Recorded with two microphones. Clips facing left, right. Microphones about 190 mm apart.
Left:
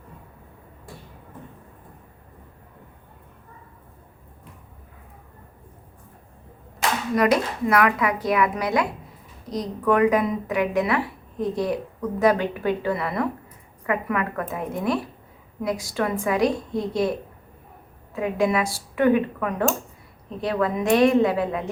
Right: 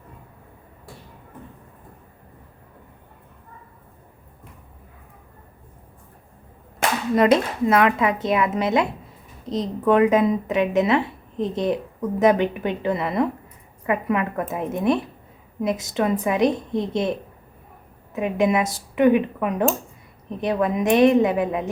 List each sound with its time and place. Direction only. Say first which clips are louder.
7.2 s speech: right 3 dB; 25° right (ahead or behind)